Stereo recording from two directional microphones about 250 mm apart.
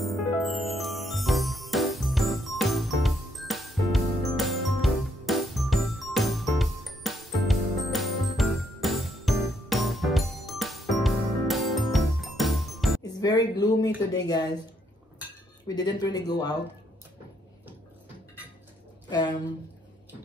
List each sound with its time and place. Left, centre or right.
0.0 s music: centre
13.0 s speech: centre
15.6 s speech: centre
19.0 s speech: centre